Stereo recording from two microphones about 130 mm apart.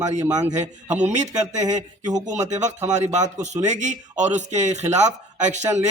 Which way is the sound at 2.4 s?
65° right (ahead or behind).